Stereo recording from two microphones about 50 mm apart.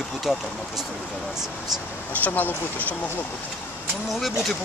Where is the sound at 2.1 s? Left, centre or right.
Left.